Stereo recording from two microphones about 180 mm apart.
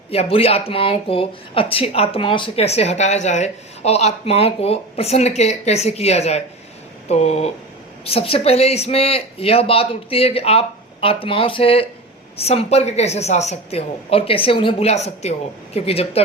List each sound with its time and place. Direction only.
0.1 s speech: 35° left (ahead or behind)